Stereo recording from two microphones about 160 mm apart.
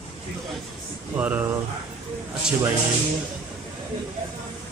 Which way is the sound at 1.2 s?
10° right (ahead or behind).